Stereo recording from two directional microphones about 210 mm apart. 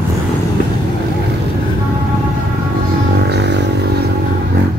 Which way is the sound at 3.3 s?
55° right (ahead or behind).